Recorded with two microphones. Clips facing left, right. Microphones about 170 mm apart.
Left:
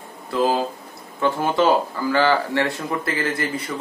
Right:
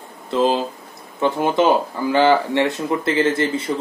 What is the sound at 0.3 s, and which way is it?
Speech, 20° right (ahead or behind).